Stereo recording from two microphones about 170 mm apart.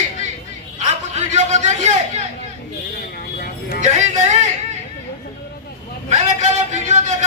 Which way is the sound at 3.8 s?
45° right (ahead or behind).